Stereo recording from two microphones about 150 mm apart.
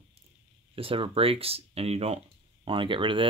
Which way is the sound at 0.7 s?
35° right (ahead or behind).